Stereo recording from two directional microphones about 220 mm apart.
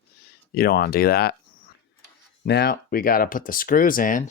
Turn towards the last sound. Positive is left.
turn(degrees=40)  # may be behind; listen again after turning